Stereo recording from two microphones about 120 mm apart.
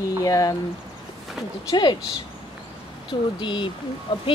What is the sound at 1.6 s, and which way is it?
Speech, 40° left (ahead or behind).